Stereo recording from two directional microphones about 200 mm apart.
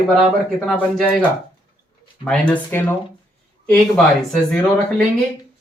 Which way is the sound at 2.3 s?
5° left (ahead or behind).